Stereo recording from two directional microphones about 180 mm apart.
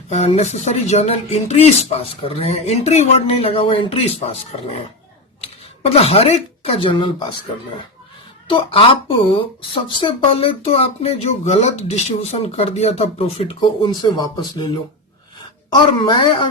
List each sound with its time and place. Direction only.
0.1 s speech: 35° left (ahead or behind)
8.4 s speech: 30° left (ahead or behind)
15.7 s a woman's voice: 25° left (ahead or behind)